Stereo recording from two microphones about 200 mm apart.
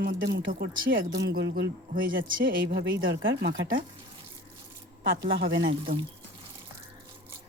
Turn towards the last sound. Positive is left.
turn(degrees=-45)  # may be behind; listen again after turning